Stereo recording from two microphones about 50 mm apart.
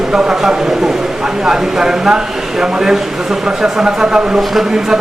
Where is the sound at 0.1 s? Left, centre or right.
Centre.